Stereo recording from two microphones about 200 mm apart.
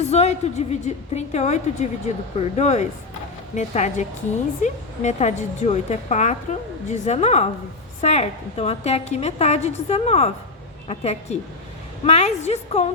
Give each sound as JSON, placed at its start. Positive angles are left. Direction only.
{"t": 0.1, "sound": "a woman's voice", "side_deg": 35}